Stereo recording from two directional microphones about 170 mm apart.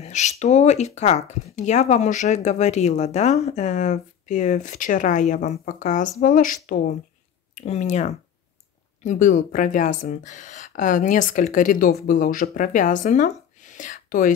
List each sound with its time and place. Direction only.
0.0 s speech: 40° left (ahead or behind)
7.5 s speech: 40° left (ahead or behind)
13.7 s whispering: 50° left (ahead or behind)